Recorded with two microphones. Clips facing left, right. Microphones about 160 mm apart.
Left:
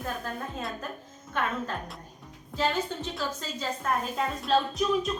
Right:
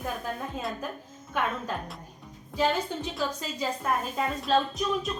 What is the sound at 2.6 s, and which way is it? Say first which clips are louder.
A woman's voice: right 2 dB; 10° right (ahead or behind).